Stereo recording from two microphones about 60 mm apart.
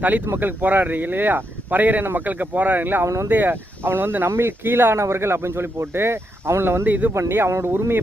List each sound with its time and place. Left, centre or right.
0.3 s speech: right